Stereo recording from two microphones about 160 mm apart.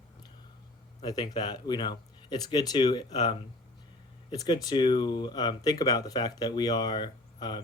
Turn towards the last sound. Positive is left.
turn(degrees=25)  # may be behind; listen again after turning